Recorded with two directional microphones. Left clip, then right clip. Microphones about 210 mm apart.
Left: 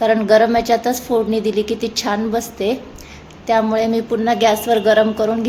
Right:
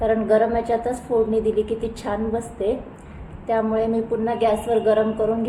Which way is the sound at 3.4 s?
20° left (ahead or behind).